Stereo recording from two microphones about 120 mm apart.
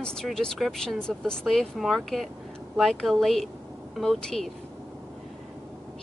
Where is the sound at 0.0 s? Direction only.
5° left (ahead or behind).